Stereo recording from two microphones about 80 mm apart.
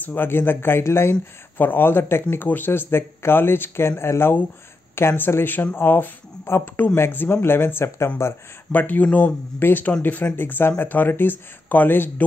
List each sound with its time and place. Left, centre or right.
0.0 s speech: left
8.7 s speech: left